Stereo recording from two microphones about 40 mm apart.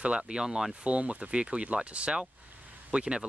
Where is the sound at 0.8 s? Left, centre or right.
Right.